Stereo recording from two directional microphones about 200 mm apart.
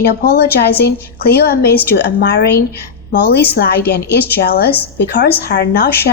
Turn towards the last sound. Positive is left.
turn(degrees=50)  # may be behind; listen again after turning